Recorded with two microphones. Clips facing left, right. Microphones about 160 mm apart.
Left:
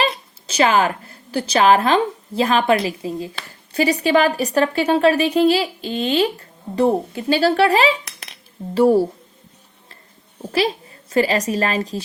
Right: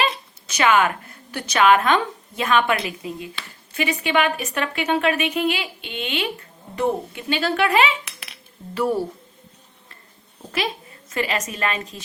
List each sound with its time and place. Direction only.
0.0 s a woman's voice: 30° left (ahead or behind)
10.5 s a woman's voice: 35° left (ahead or behind)